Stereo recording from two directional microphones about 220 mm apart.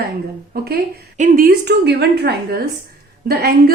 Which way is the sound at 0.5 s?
45° right (ahead or behind).